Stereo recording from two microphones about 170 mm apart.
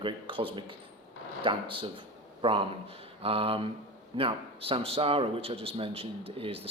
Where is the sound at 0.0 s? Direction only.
30° right (ahead or behind).